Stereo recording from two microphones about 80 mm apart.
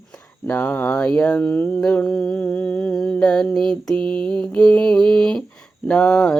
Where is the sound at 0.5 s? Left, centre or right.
Left.